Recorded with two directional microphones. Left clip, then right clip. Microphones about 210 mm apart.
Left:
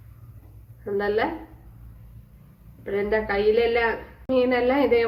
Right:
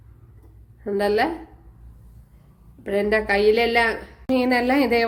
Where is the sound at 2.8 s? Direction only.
45° right (ahead or behind).